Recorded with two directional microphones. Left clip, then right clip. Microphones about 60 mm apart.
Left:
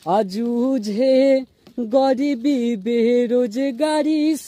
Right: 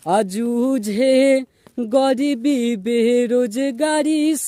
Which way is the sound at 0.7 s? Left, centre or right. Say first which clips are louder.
Even; right.